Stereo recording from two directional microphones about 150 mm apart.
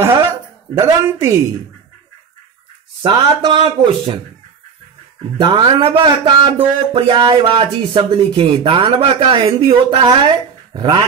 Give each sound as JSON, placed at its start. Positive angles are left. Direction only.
{"t": 0.1, "sound": "a sound", "side_deg": -25}
{"t": 3.0, "sound": "speech", "side_deg": -30}
{"t": 5.4, "sound": "speech", "side_deg": -30}